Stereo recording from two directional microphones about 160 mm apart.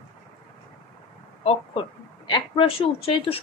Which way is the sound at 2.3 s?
35° left (ahead or behind).